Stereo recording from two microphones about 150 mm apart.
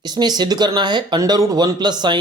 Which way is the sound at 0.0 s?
25° right (ahead or behind).